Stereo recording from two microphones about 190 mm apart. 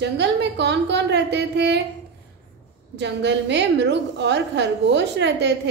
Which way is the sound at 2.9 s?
65° right (ahead or behind).